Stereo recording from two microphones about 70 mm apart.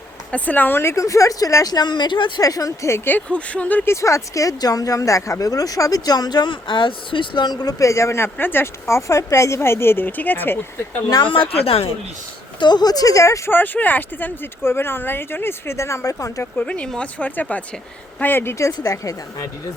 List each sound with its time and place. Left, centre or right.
0.3 s speech: left
1.7 s a woman's voice: left
2.9 s speech: left
3.2 s speech: centre
3.8 s speech: left
7.8 s speech: left
12.5 s speech: left
13.5 s speech: left
16.6 s speech: centre
18.7 s speech: left